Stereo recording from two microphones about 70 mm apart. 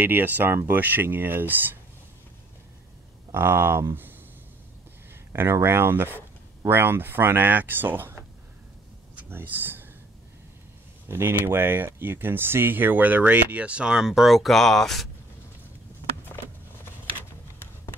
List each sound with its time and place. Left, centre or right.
0.0 s speech: right
3.3 s speech: right
5.3 s speech: right
9.3 s speech: right
11.1 s speech: right; by 15.0 s centre